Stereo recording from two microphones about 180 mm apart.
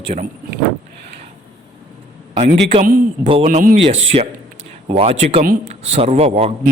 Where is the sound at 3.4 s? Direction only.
45° right (ahead or behind).